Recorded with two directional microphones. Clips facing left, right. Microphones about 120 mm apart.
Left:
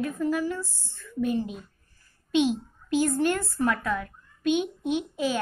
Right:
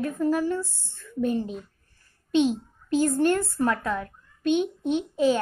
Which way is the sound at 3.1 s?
35° right (ahead or behind).